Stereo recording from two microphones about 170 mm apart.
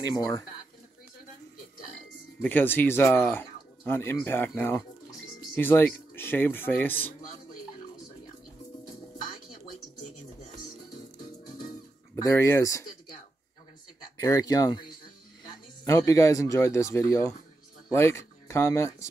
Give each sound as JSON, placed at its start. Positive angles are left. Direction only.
{"t": 0.0, "sound": "speech", "side_deg": 20}
{"t": 2.4, "sound": "speech", "side_deg": 10}
{"t": 11.4, "sound": "music", "side_deg": 55}
{"t": 12.2, "sound": "speech", "side_deg": 15}
{"t": 14.2, "sound": "speech", "side_deg": 20}